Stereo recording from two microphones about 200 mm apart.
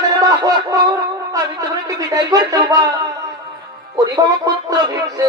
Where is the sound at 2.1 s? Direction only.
20° right (ahead or behind).